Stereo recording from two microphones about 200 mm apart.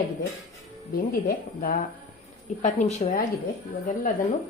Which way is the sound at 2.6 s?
35° left (ahead or behind).